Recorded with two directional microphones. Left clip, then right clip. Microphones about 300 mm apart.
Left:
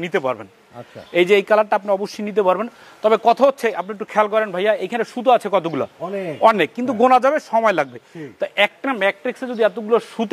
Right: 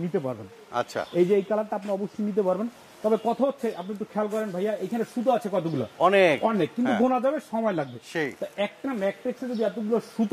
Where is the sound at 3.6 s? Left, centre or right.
Centre.